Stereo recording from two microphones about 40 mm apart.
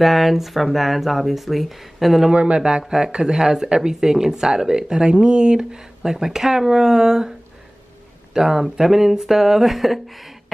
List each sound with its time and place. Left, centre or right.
0.0 s speech: centre
2.3 s a man's voice: right; by 9.9 s centre